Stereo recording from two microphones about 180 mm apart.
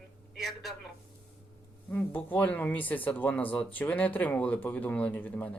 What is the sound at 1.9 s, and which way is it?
Speech, 10° left (ahead or behind).